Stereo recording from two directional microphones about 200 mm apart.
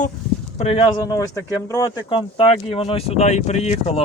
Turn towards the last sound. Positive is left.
turn(degrees=35)  # may be behind; listen again after turning